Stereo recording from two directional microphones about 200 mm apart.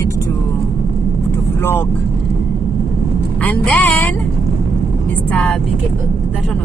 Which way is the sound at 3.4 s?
10° left (ahead or behind).